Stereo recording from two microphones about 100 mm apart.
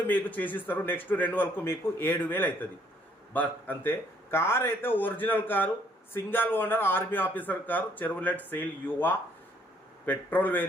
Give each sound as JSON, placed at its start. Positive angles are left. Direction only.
{"t": 0.1, "sound": "a man's voice", "side_deg": 15}